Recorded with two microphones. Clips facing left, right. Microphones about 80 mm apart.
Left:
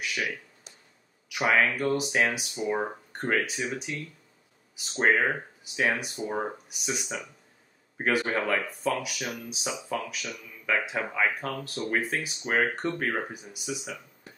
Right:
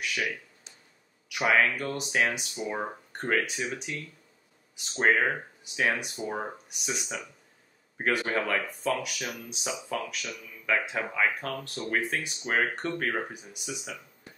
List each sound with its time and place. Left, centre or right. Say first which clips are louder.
1.3 s speech: even; centre